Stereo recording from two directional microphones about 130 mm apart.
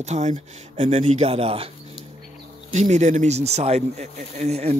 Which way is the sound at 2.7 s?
65° right (ahead or behind).